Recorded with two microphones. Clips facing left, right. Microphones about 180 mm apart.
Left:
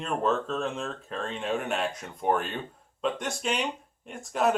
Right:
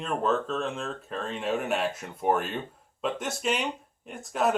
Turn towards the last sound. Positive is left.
turn(degrees=0)  # may be behind; listen again after turning